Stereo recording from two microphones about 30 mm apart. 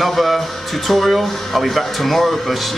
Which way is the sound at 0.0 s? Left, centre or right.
Centre.